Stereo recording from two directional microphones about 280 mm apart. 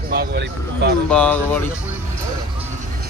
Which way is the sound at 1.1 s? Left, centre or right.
Centre.